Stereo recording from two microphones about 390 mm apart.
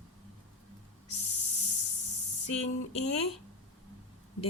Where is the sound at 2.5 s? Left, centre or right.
Centre.